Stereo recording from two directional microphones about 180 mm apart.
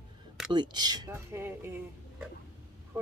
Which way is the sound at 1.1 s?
10° right (ahead or behind).